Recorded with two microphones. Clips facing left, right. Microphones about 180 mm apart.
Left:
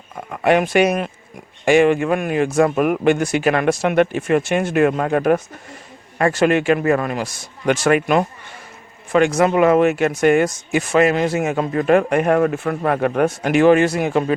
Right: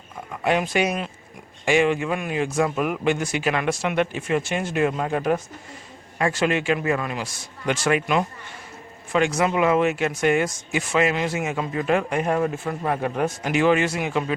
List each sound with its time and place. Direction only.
0.3 s speech: 60° left (ahead or behind); by 14.3 s 45° left (ahead or behind)